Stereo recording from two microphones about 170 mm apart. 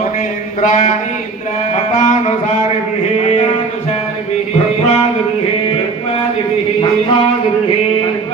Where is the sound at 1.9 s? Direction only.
45° left (ahead or behind).